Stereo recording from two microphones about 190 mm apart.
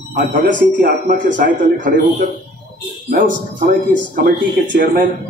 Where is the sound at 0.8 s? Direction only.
50° right (ahead or behind).